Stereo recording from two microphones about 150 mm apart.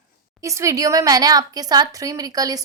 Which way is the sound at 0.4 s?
20° right (ahead or behind).